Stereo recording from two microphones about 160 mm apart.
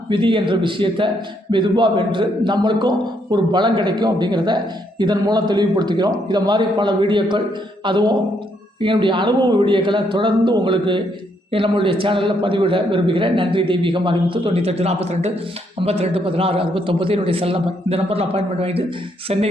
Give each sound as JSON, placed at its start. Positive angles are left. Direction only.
{"t": 0.1, "sound": "a man's voice", "side_deg": -30}